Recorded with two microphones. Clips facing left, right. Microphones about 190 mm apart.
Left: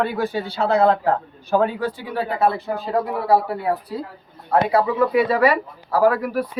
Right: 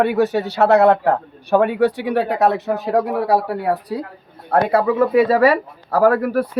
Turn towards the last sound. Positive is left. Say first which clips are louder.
# right 3 dB
turn(degrees=-45)  # may be behind; listen again after turning